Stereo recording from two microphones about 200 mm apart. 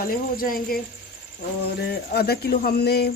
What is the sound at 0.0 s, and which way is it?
Speech, 45° left (ahead or behind).